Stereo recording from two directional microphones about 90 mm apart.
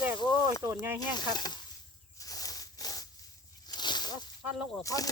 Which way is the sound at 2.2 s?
40° left (ahead or behind).